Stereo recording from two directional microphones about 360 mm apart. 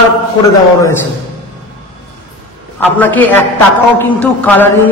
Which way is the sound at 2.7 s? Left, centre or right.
Centre.